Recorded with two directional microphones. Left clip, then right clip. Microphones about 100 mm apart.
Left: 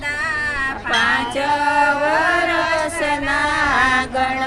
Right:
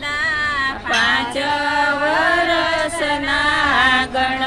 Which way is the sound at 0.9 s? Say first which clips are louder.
Even; centre (ahead or behind).